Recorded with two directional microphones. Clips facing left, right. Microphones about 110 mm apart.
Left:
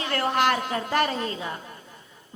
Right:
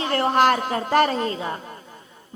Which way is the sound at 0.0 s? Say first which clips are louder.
Right 5 dB; 30° right (ahead or behind).